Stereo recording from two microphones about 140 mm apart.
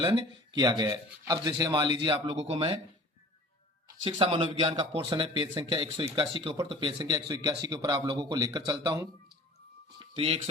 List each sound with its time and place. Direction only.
0.0 s speech: 30° right (ahead or behind)
2.3 s speech: 50° right (ahead or behind)
4.0 s speech: 40° right (ahead or behind)
10.0 s speech: 40° right (ahead or behind)